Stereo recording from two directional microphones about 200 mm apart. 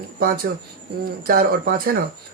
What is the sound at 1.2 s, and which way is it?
Speech, 45° right (ahead or behind).